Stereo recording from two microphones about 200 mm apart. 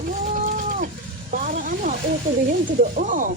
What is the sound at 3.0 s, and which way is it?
Speech, 40° right (ahead or behind).